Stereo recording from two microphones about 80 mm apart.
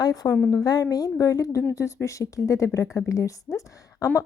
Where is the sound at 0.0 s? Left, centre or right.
Left.